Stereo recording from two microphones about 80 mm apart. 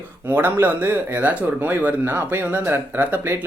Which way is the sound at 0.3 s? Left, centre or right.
Right.